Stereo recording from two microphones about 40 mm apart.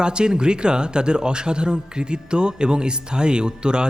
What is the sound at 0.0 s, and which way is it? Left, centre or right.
A man's voice, right.